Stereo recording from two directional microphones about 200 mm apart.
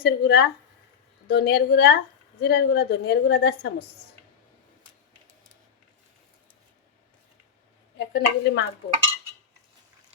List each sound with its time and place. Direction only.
0.0 s a woman's voice: 55° left (ahead or behind)
7.9 s a woman's voice: 60° left (ahead or behind)